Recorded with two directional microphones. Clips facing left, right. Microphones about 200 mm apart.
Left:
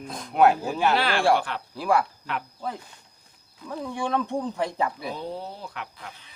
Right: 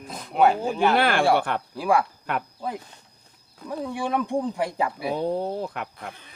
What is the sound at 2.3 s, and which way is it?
Speech, 50° right (ahead or behind).